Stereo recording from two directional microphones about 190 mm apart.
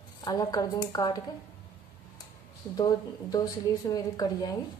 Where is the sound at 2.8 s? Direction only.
20° left (ahead or behind).